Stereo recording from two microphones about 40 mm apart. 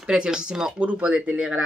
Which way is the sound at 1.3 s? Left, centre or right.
Right.